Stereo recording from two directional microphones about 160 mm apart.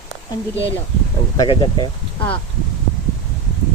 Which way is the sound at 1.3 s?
30° left (ahead or behind).